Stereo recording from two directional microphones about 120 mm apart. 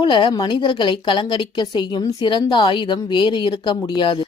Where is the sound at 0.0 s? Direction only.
40° left (ahead or behind).